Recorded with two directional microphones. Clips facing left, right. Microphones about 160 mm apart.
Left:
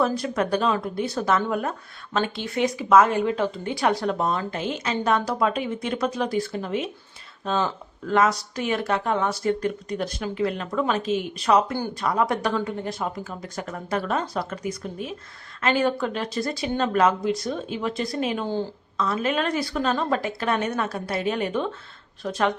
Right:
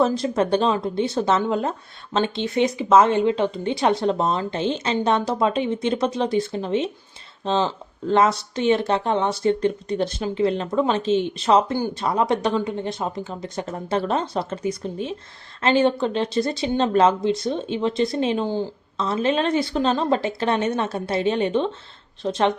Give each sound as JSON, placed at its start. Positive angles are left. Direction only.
{"t": 0.0, "sound": "speech", "side_deg": -25}
{"t": 18.9, "sound": "speech", "side_deg": -25}